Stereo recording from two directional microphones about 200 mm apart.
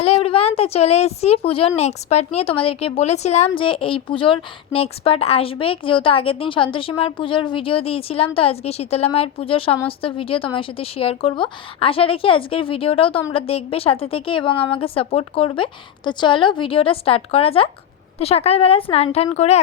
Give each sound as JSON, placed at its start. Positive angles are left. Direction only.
{"t": 0.0, "sound": "a woman's voice", "side_deg": 30}